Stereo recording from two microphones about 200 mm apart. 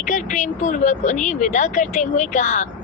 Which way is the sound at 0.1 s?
40° left (ahead or behind).